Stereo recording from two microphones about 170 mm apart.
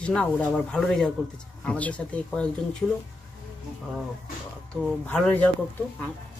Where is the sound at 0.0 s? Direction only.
5° left (ahead or behind).